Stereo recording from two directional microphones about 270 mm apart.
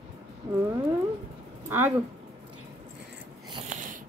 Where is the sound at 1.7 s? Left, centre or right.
Centre.